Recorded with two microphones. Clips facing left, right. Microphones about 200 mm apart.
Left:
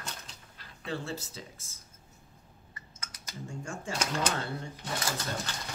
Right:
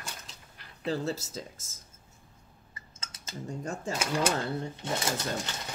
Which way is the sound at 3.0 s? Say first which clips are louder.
Right 2 dB; 25° right (ahead or behind).